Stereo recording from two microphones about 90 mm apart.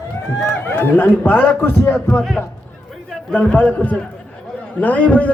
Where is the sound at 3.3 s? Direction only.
15° left (ahead or behind).